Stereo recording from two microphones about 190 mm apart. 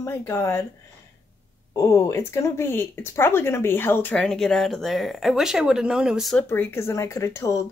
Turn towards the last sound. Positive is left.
turn(degrees=15)  # may be behind; listen again after turning